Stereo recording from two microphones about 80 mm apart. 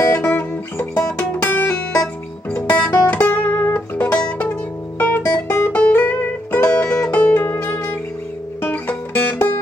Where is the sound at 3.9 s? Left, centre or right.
Centre.